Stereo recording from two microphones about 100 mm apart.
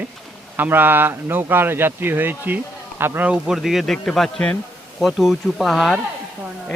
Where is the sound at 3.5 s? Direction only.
5° right (ahead or behind).